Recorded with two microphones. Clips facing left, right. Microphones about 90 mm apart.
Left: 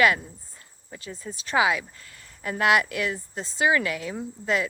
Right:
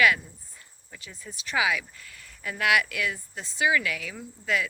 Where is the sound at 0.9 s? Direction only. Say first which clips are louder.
Left 7 dB; 35° left (ahead or behind).